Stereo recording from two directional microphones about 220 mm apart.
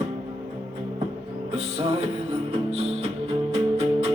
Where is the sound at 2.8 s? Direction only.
30° right (ahead or behind).